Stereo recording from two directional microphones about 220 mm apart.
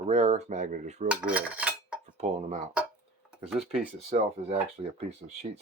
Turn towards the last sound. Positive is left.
turn(degrees=-30)  # may be behind; listen again after turning